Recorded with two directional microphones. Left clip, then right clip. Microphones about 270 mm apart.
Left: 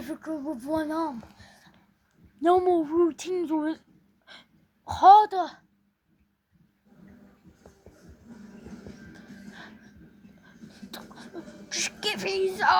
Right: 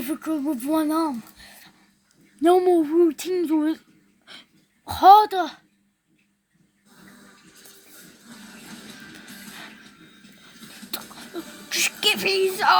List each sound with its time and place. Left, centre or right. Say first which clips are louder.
0.0 s speech: right 7 dB; right
4.9 s speech: right 3 dB; right
10.7 s music: right 8 dB; right